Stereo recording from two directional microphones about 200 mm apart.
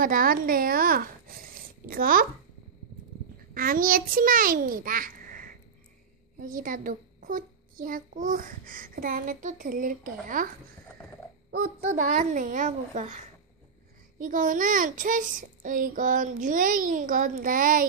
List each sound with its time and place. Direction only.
0.0 s a child's voice: 45° right (ahead or behind)
3.5 s a child's voice: 45° right (ahead or behind)
11.8 s a child's voice: 35° right (ahead or behind)